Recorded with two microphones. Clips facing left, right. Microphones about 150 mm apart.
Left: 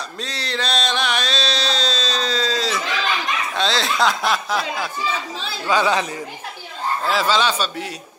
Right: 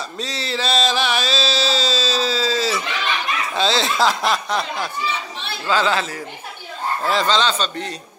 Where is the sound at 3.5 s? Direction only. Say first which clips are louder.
Right 3 dB; centre (ahead or behind).